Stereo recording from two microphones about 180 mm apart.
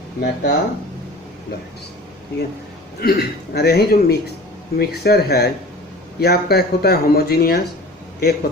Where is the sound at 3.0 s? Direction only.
60° left (ahead or behind).